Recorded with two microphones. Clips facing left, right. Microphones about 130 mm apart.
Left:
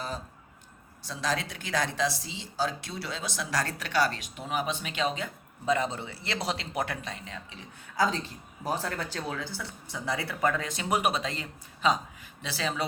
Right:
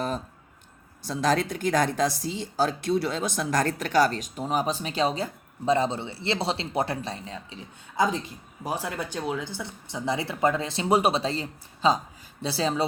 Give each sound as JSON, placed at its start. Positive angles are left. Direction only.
{"t": 1.0, "sound": "speech", "side_deg": -50}
{"t": 7.9, "sound": "speech", "side_deg": -15}